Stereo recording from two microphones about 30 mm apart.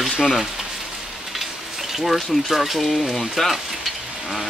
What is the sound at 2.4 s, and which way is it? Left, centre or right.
Speech, centre.